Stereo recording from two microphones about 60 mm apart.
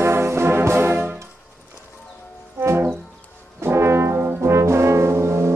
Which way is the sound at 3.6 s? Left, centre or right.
Right.